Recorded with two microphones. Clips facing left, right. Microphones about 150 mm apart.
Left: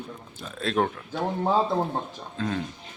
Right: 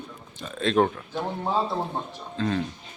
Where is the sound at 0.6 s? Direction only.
5° left (ahead or behind).